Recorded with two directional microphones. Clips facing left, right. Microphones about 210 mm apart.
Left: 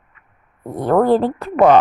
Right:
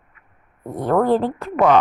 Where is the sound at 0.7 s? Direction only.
35° left (ahead or behind).